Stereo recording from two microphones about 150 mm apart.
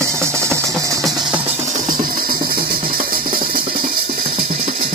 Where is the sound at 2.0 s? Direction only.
75° right (ahead or behind).